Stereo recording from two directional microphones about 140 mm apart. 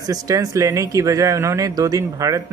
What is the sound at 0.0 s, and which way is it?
Speech, 25° right (ahead or behind).